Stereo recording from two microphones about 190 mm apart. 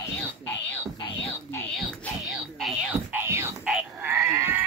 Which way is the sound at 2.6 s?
5° right (ahead or behind).